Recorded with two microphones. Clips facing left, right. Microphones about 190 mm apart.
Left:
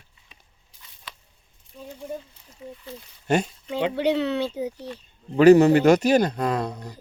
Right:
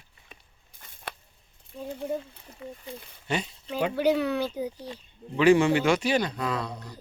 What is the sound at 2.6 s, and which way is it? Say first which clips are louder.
Speech: left 1 dB; 70° right (ahead or behind).